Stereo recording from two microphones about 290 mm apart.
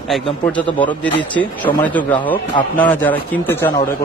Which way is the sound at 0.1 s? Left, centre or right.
Centre.